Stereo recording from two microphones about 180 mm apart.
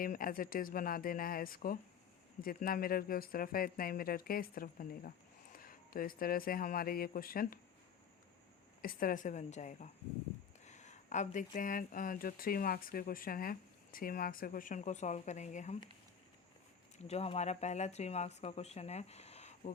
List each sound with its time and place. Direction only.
0.0 s speech: 50° left (ahead or behind)
8.8 s speech: 50° left (ahead or behind)
17.0 s speech: 35° left (ahead or behind)